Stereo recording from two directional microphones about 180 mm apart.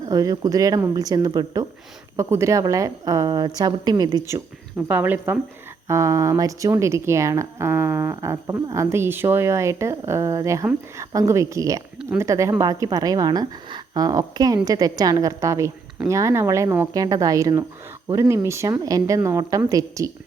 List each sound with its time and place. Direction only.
0.1 s a woman's voice: 20° right (ahead or behind)
4.9 s a woman's voice: 10° right (ahead or behind)